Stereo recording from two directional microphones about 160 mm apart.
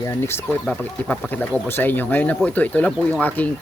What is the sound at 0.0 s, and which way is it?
Speech, 15° left (ahead or behind).